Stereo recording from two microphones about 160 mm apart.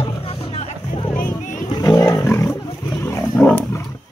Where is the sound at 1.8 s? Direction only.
20° left (ahead or behind).